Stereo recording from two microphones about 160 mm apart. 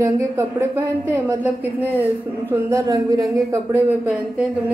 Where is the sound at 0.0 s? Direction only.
15° right (ahead or behind).